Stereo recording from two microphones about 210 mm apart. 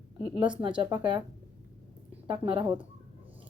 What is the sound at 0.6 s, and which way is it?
Speech, 20° right (ahead or behind).